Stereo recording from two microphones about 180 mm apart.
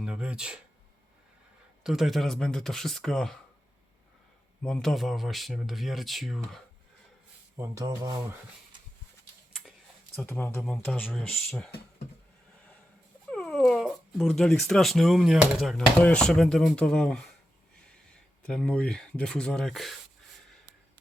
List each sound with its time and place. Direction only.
0.0 s speech: 5° right (ahead or behind)
1.8 s speech: centre (ahead or behind)
4.6 s speech: centre (ahead or behind)
7.6 s speech: 20° right (ahead or behind)
10.2 s speech: 10° left (ahead or behind)
13.3 s speech: centre (ahead or behind)